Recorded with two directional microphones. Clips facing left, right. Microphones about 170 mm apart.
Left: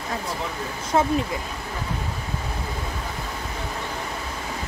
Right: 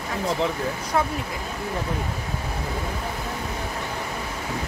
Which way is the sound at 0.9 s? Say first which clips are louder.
Left 3 dB; 25° left (ahead or behind).